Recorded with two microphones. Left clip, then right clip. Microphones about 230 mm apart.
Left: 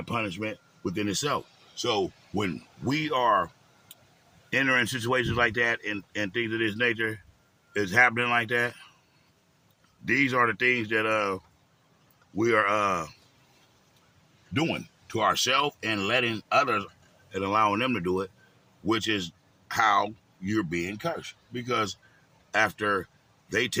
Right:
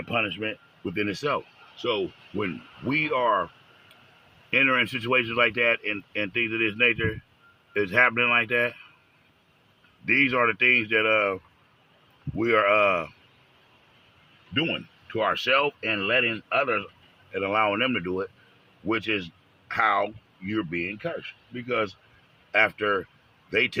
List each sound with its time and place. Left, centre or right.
0.1 s speech: centre
1.8 s speech: left
2.8 s speech: centre
4.5 s speech: centre
10.1 s speech: centre
12.5 s speech: centre
14.5 s speech: centre
17.3 s a man's voice: centre